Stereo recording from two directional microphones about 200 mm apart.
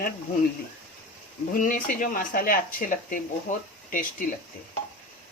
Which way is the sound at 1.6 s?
40° left (ahead or behind).